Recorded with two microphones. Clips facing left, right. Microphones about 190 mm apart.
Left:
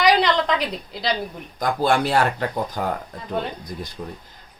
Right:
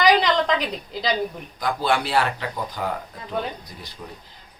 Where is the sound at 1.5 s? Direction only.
45° left (ahead or behind).